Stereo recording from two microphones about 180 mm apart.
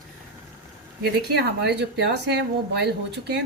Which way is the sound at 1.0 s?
65° right (ahead or behind).